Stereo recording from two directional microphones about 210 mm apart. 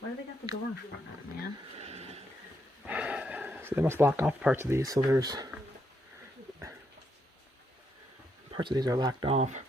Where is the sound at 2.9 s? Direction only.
5° right (ahead or behind).